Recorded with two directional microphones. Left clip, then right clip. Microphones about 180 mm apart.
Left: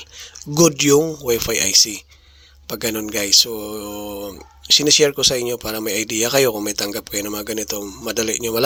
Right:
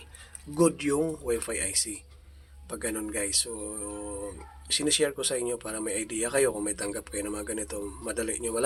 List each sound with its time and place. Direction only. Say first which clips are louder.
0.2 s speech: left 9 dB; 40° left (ahead or behind)